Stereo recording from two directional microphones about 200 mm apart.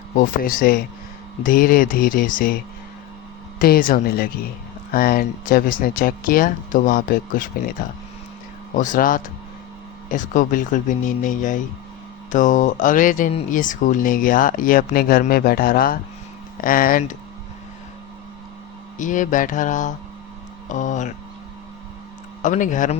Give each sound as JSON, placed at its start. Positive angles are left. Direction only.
{"t": 0.2, "sound": "speech", "side_deg": 45}
{"t": 3.6, "sound": "speech", "side_deg": 45}
{"t": 18.9, "sound": "speech", "side_deg": 40}
{"t": 22.4, "sound": "speech", "side_deg": 40}